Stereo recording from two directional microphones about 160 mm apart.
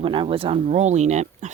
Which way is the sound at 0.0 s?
30° right (ahead or behind).